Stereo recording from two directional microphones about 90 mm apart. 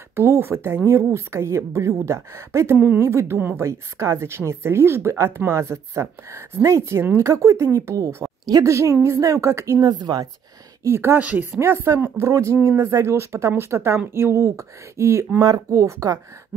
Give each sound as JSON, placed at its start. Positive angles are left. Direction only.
{"t": 0.1, "sound": "a woman's voice", "side_deg": -25}
{"t": 9.8, "sound": "speech", "side_deg": -45}
{"t": 10.8, "sound": "a woman's voice", "side_deg": -25}
{"t": 15.4, "sound": "a woman's voice", "side_deg": -40}